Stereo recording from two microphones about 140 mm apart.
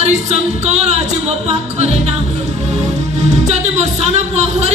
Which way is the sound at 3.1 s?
50° right (ahead or behind).